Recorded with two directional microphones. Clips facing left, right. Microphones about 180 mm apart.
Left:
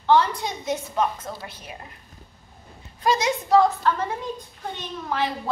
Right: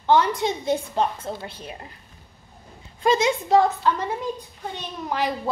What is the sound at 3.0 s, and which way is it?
Speech, 25° right (ahead or behind).